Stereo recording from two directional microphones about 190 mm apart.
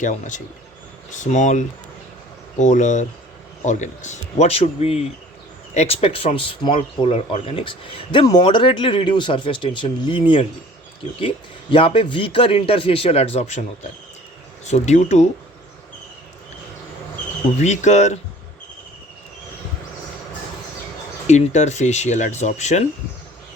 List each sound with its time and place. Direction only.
0.0 s speech: 40° left (ahead or behind); by 10.4 s 25° left (ahead or behind)
11.7 s speech: 30° left (ahead or behind)
14.6 s speech: 35° left (ahead or behind)
17.6 s speech: 35° left (ahead or behind)
21.2 s speech: 35° left (ahead or behind)